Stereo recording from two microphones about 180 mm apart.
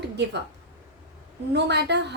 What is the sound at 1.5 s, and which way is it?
Speech, 70° right (ahead or behind).